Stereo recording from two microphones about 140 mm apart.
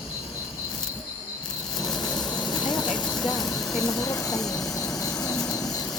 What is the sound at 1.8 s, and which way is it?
Vehicle, 25° left (ahead or behind).